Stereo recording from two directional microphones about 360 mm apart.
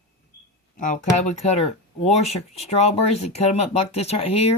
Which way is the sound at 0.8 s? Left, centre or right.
Left.